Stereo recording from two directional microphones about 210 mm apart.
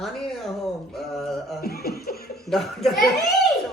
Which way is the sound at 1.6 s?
45° left (ahead or behind).